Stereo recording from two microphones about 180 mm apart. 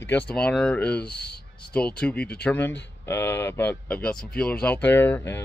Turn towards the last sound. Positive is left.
turn(degrees=15)  # may be behind; listen again after turning